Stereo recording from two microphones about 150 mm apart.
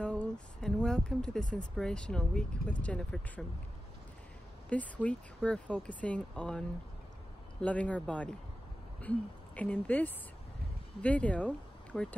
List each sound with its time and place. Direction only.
0.0 s speech: 5° left (ahead or behind)
4.6 s speech: 10° left (ahead or behind)
7.6 s speech: 10° left (ahead or behind)
9.6 s speech: 10° left (ahead or behind)